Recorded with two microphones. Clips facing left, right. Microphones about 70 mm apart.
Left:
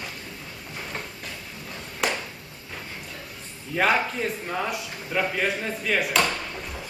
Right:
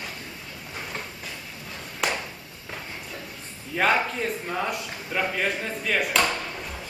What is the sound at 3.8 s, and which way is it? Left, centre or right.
A man's voice, centre.